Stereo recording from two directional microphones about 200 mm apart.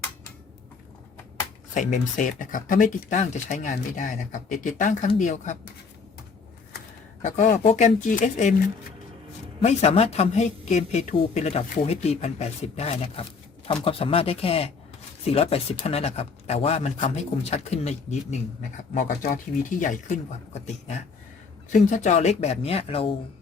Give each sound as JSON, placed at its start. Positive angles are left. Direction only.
{"t": 1.7, "sound": "speech", "side_deg": 40}
{"t": 7.2, "sound": "speech", "side_deg": 35}